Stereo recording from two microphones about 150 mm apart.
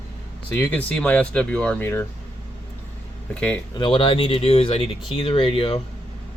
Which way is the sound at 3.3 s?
10° left (ahead or behind).